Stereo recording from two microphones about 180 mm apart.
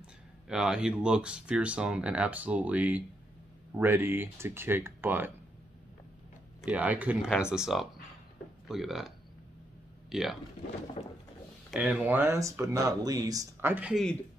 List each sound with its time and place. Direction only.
0.0 s speech: 5° right (ahead or behind)
6.6 s speech: 10° right (ahead or behind)
11.0 s a sound: 35° left (ahead or behind)
11.7 s speech: 5° right (ahead or behind)